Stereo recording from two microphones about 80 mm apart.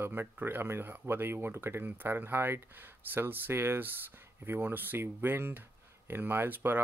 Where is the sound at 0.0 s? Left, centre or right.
Right.